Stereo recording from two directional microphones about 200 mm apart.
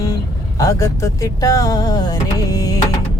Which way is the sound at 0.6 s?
15° left (ahead or behind).